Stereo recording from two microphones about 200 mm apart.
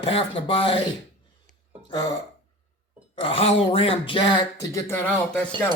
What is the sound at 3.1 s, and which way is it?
Speech, 30° left (ahead or behind).